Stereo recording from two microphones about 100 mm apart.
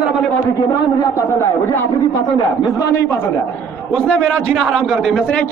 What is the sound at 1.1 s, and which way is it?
Speech, 25° left (ahead or behind).